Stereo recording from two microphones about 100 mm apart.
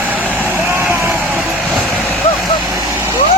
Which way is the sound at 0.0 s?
15° right (ahead or behind).